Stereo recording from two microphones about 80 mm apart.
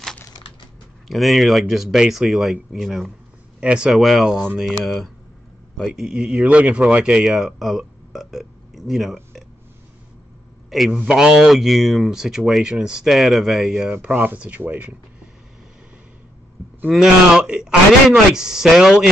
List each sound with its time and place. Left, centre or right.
1.0 s speech: centre
3.6 s a man's voice: centre
3.9 s a man's voice: centre
10.9 s speech: centre
14.0 s speech: right
16.9 s a man's voice: centre